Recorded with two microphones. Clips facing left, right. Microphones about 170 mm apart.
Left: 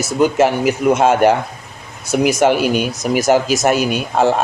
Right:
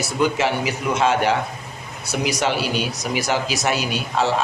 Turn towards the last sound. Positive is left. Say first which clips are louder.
# left 6 dB
turn(degrees=50)  # may be behind; listen again after turning